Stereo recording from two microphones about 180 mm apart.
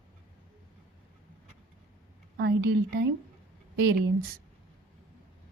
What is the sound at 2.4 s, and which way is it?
Speech, 70° right (ahead or behind).